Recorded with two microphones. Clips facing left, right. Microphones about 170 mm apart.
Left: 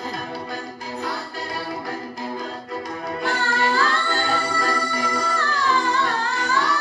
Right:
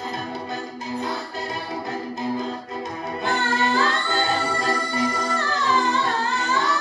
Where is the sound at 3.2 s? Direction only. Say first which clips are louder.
Right 1 dB; 20° right (ahead or behind).